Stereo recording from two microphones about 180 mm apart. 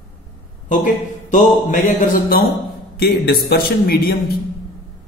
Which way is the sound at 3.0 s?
60° left (ahead or behind).